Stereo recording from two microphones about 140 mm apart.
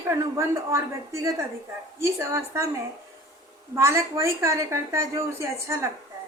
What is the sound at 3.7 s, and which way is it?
A woman's voice, 20° right (ahead or behind).